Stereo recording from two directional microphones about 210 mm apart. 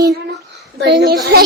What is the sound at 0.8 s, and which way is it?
Speech, 55° right (ahead or behind).